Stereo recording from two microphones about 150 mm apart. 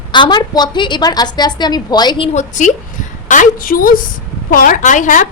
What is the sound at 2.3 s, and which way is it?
Speech, 55° left (ahead or behind).